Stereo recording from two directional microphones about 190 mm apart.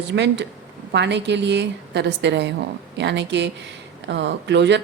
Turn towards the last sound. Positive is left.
turn(degrees=-65)  # may be behind; listen again after turning